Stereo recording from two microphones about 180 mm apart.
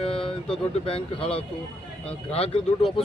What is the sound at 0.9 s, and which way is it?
Speech, 30° left (ahead or behind).